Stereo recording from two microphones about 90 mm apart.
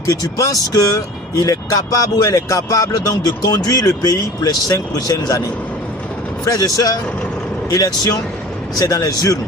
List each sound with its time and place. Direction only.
0.0 s speech: 40° left (ahead or behind)
6.4 s speech: 40° left (ahead or behind)